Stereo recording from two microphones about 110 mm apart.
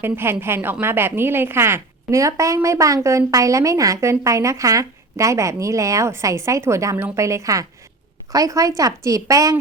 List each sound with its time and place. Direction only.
0.0 s a woman's voice: 20° right (ahead or behind)